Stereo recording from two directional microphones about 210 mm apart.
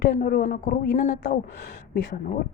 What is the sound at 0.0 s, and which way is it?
A woman's voice, 45° left (ahead or behind).